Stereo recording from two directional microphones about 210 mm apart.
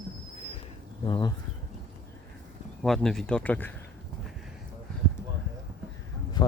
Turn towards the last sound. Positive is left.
turn(degrees=20)  # may be behind; listen again after turning